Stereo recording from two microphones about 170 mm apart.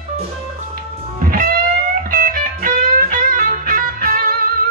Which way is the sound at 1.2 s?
55° right (ahead or behind).